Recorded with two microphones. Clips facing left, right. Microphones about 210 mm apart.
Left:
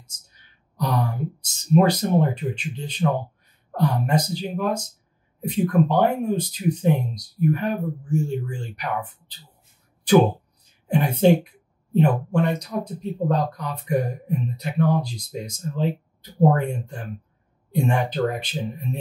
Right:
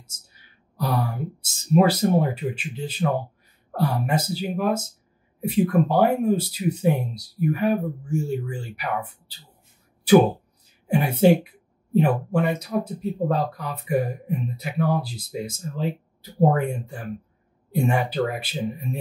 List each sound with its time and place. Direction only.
0.7 s a woman's voice: 5° right (ahead or behind)
10.9 s a woman's voice: 10° right (ahead or behind)